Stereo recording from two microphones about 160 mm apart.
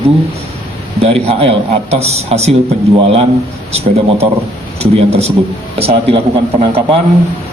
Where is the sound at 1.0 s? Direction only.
40° right (ahead or behind).